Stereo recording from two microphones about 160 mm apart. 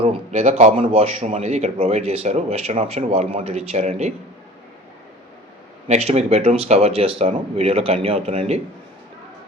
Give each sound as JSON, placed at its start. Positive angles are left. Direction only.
{"t": 0.0, "sound": "speech", "side_deg": -40}
{"t": 5.9, "sound": "speech", "side_deg": -40}